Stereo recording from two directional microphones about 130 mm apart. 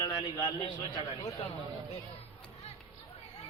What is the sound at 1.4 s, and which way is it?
Speech, 45° left (ahead or behind).